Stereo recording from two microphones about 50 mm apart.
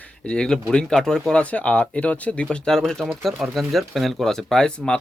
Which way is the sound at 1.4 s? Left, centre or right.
Left.